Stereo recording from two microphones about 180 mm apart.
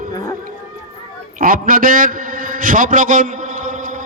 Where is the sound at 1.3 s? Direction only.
50° right (ahead or behind).